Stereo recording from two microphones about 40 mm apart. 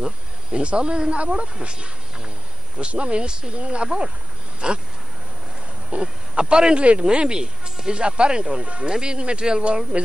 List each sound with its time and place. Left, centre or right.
0.0 s speech: right
5.9 s speech: right